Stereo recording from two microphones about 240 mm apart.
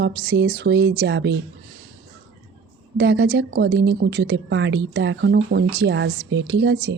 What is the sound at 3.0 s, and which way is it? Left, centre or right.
Speech, right.